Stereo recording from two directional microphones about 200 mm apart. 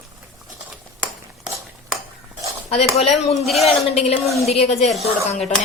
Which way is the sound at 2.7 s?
30° left (ahead or behind).